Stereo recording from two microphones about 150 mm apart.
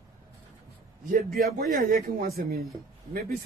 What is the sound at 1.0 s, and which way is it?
A man's voice, 75° right (ahead or behind).